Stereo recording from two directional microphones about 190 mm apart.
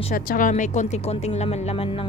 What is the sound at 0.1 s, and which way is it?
A woman's voice, 45° left (ahead or behind).